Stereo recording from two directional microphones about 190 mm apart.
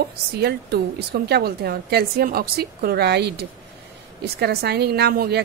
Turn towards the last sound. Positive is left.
turn(degrees=-55)  # may be behind; listen again after turning